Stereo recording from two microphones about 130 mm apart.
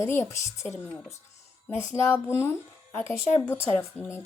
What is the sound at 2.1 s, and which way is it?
A woman's voice, 20° left (ahead or behind).